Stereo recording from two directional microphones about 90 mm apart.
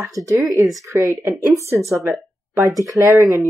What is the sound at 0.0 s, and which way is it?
Speech, 35° right (ahead or behind).